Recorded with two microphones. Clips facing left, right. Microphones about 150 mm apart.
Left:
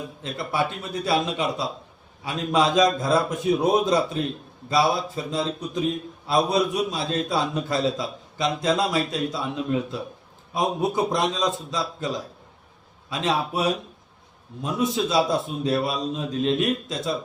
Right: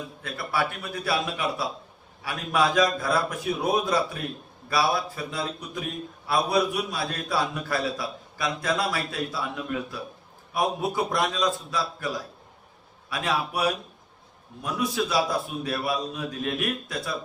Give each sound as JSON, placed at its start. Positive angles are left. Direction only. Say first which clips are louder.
{"t": 0.2, "sound": "a man's voice", "louder": "left 2 dB", "side_deg": 20}